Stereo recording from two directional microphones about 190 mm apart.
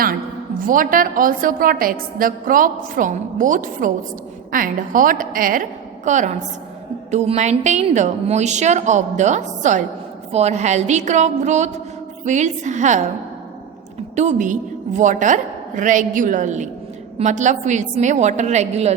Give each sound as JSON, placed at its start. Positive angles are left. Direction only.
{"t": 0.7, "sound": "a woman's voice", "side_deg": -45}
{"t": 14.2, "sound": "a woman's voice", "side_deg": -40}